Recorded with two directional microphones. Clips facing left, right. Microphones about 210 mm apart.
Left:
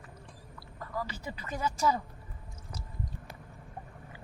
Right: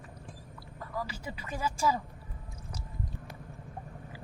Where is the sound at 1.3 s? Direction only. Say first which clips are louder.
Left 1 dB; 10° right (ahead or behind).